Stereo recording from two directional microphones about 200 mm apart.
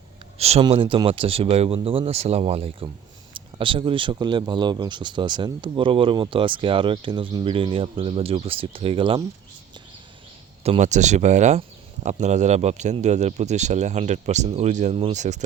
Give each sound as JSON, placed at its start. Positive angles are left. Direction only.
{"t": 0.3, "sound": "speech", "side_deg": -30}
{"t": 10.6, "sound": "speech", "side_deg": -35}